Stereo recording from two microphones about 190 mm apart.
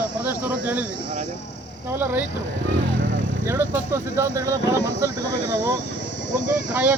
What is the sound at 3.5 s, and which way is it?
Speech, 15° right (ahead or behind).